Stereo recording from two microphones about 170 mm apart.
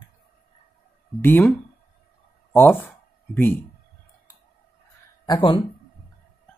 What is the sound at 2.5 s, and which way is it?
Speech, 10° left (ahead or behind).